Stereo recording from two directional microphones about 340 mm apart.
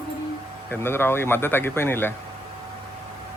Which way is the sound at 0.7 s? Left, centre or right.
Centre.